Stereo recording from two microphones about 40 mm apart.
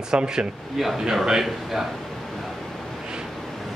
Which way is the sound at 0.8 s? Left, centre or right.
Centre.